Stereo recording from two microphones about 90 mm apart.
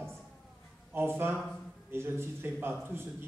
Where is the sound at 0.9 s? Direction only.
25° right (ahead or behind).